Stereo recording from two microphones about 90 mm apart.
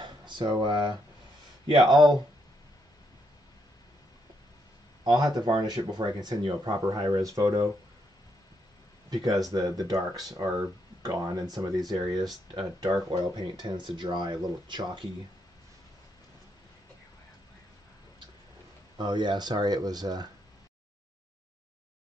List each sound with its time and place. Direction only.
0.0 s a sound: 55° right (ahead or behind)
1.7 s speech: 55° right (ahead or behind)
5.0 s speech: 50° right (ahead or behind)
9.1 s speech: 45° right (ahead or behind)
11.6 s speech: 50° right (ahead or behind)
18.9 s speech: 55° right (ahead or behind)